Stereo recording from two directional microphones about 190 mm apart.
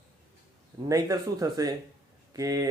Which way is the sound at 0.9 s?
20° right (ahead or behind).